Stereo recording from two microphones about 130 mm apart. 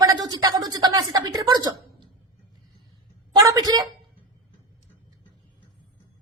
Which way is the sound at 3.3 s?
30° right (ahead or behind).